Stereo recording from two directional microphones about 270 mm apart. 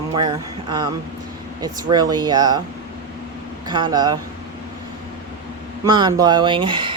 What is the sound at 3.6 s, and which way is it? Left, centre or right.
Speech, centre.